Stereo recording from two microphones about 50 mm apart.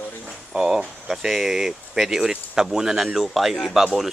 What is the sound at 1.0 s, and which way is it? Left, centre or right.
Speech, centre.